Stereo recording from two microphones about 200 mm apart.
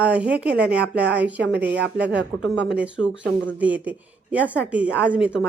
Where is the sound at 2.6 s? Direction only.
5° right (ahead or behind).